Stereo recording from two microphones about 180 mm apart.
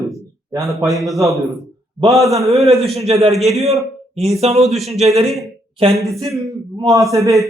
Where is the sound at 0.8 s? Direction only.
Centre (ahead or behind).